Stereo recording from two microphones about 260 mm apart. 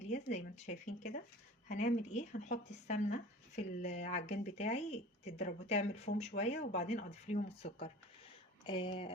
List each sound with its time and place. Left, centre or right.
0.0 s speech: left